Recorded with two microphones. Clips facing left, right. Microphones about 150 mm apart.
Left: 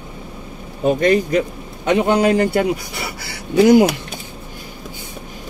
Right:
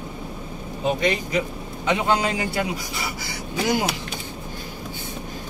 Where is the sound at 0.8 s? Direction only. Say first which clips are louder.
Left 8 dB; 50° left (ahead or behind).